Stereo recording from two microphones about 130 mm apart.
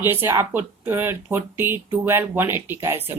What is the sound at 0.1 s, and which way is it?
Speech, 15° right (ahead or behind).